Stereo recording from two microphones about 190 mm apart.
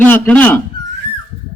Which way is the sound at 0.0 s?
10° left (ahead or behind).